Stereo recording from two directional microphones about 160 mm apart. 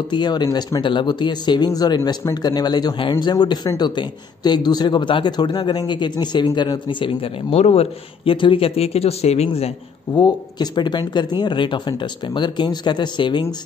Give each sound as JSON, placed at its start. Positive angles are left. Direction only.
{"t": 0.1, "sound": "speech", "side_deg": 25}
{"t": 10.1, "sound": "speech", "side_deg": 25}